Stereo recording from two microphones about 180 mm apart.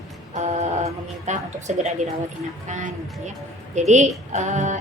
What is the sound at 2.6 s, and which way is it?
A woman's voice, 45° right (ahead or behind).